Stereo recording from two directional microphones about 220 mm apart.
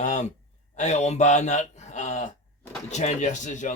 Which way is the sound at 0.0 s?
35° left (ahead or behind).